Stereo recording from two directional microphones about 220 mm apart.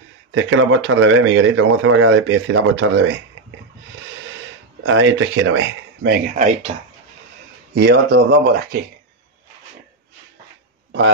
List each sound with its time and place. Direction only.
0.3 s speech: 55° right (ahead or behind)
4.8 s speech: 65° right (ahead or behind)
6.0 s speech: 40° right (ahead or behind)
7.8 s speech: 50° right (ahead or behind)